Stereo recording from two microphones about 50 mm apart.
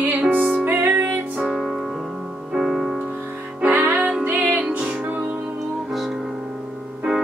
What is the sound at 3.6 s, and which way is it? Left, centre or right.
Music, right.